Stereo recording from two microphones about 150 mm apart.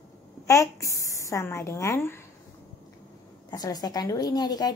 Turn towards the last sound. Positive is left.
turn(degrees=25)  # may be behind; listen again after turning